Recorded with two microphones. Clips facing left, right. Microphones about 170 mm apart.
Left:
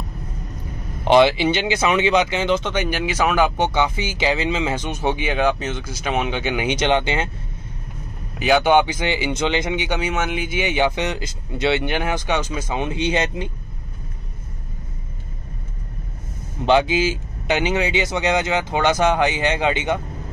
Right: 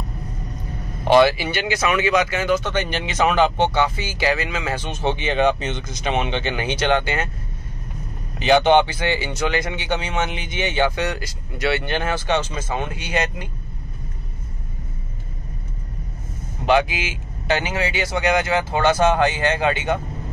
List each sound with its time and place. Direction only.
1.0 s speech: 20° left (ahead or behind)
8.4 s speech: 10° left (ahead or behind); by 13.5 s 25° left (ahead or behind)
16.6 s speech: 25° left (ahead or behind)
17.5 s speech: 20° left (ahead or behind)